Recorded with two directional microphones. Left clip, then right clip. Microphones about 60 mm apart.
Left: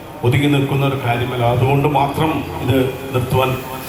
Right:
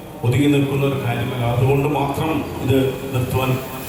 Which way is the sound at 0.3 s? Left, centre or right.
Left.